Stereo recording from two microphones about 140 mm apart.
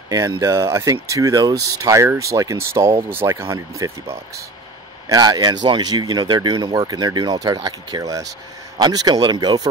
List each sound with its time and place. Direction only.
0.1 s speech: 25° right (ahead or behind)